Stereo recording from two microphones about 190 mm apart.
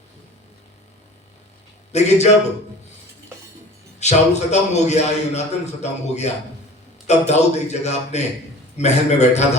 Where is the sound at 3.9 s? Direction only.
35° left (ahead or behind).